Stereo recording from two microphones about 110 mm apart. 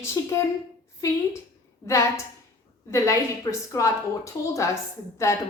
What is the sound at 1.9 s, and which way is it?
A woman's voice, 25° left (ahead or behind).